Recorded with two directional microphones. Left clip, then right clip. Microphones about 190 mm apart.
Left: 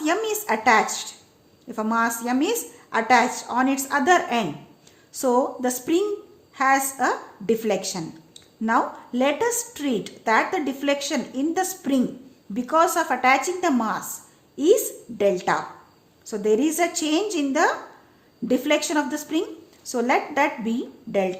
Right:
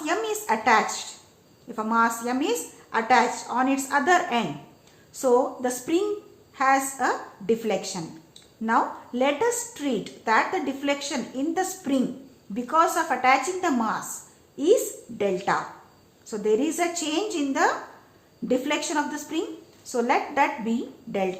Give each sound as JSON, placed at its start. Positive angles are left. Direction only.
{"t": 0.0, "sound": "a woman's voice", "side_deg": 40}